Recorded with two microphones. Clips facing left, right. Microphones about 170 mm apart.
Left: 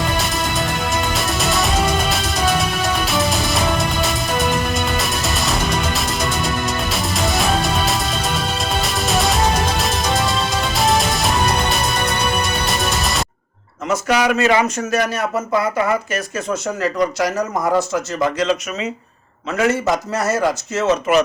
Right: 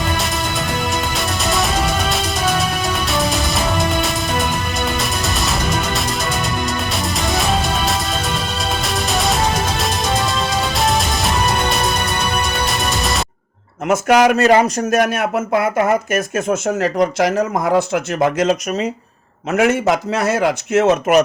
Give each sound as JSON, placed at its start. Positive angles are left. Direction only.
{"t": 0.9, "sound": "music", "side_deg": 0}
{"t": 4.9, "sound": "music", "side_deg": 0}
{"t": 8.8, "sound": "music", "side_deg": 0}
{"t": 12.6, "sound": "music", "side_deg": 0}
{"t": 13.8, "sound": "a man's voice", "side_deg": -50}